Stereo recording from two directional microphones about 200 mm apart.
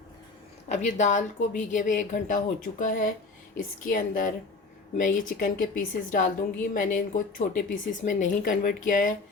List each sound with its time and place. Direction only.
0.7 s speech: 35° left (ahead or behind)